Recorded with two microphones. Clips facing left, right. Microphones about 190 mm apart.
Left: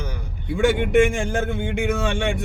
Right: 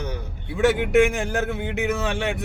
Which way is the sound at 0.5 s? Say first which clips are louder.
Left 1 dB; centre (ahead or behind).